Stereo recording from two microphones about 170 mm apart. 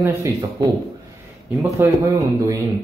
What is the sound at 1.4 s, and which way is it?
Speech, 15° right (ahead or behind).